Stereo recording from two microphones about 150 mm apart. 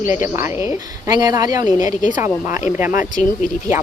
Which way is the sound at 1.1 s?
25° right (ahead or behind).